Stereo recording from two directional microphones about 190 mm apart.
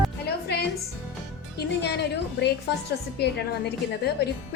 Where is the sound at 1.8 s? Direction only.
60° left (ahead or behind).